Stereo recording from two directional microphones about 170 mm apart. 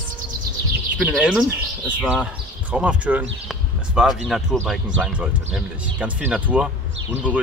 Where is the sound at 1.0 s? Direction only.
5° right (ahead or behind).